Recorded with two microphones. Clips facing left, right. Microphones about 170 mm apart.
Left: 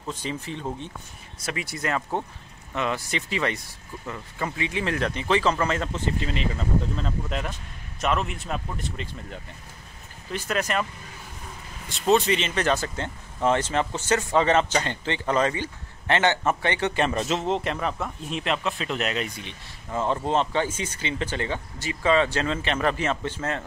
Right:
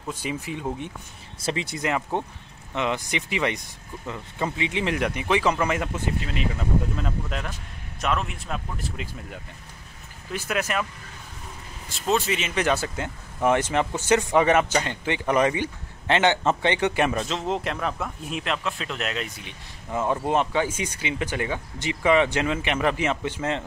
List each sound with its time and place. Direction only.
0.1 s speech: 10° right (ahead or behind)
1.4 s speech: 25° right (ahead or behind); by 9.4 s 5° right (ahead or behind)
10.5 s speech: 5° right (ahead or behind)
11.9 s speech: 5° right (ahead or behind)
17.2 s speech: 5° left (ahead or behind); by 23.6 s 15° right (ahead or behind)